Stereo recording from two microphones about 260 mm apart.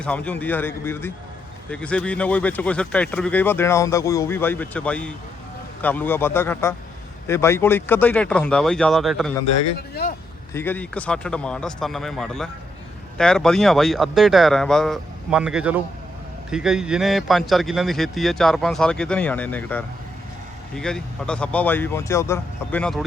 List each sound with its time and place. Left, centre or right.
0.0 s a man's voice: centre
9.9 s speech: left
10.5 s speech: centre